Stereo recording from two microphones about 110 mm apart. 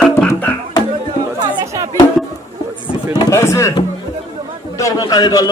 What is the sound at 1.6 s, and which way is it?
Music, 30° right (ahead or behind).